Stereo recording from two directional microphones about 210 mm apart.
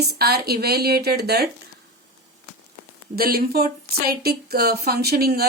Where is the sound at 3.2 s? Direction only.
45° right (ahead or behind).